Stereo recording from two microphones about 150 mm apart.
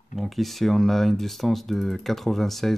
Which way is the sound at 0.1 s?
Centre (ahead or behind).